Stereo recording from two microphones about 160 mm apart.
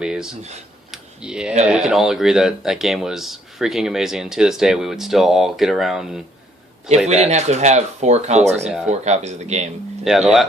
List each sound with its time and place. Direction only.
0.0 s speech: 5° right (ahead or behind)
0.9 s computer keyboard: 5° right (ahead or behind)
1.6 s speech: 5° right (ahead or behind)
7.1 s speech: 45° right (ahead or behind)
10.0 s speech: 5° right (ahead or behind)